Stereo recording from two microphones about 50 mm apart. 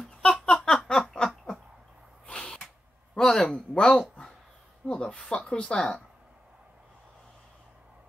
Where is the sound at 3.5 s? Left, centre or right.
Centre.